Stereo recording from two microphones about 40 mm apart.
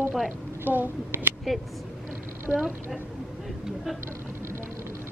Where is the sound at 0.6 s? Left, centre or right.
Right.